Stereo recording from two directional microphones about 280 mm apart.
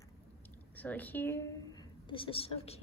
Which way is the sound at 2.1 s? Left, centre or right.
Centre.